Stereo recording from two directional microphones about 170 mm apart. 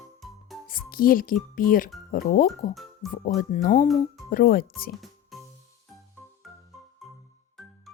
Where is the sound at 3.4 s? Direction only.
50° left (ahead or behind).